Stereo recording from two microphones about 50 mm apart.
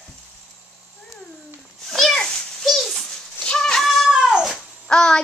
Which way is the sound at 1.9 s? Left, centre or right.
Centre.